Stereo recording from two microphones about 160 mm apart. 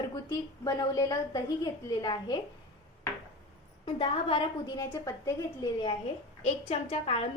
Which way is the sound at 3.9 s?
30° left (ahead or behind).